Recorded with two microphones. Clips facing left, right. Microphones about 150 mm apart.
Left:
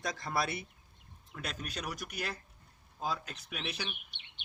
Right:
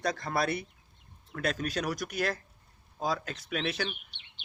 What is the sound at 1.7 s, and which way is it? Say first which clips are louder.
Speech: right 8 dB; 80° right.